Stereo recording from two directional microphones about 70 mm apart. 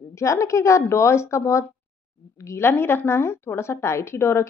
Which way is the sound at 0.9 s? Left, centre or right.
Left.